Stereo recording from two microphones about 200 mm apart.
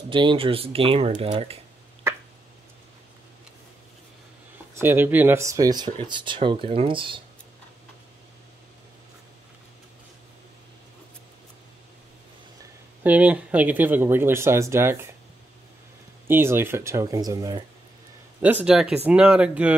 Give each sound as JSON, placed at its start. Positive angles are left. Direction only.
{"t": 0.1, "sound": "speech", "side_deg": -25}
{"t": 4.7, "sound": "speech", "side_deg": -10}
{"t": 13.0, "sound": "speech", "side_deg": -5}
{"t": 16.3, "sound": "speech", "side_deg": -10}